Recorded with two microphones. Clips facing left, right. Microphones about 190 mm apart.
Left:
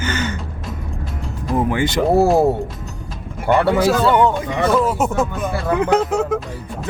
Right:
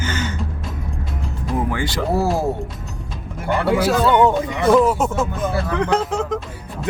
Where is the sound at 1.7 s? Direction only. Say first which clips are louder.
Left 5 dB; 20° left (ahead or behind).